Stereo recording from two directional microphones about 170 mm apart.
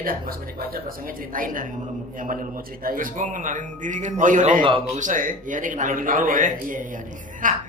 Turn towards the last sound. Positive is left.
turn(degrees=-50)  # may be behind; listen again after turning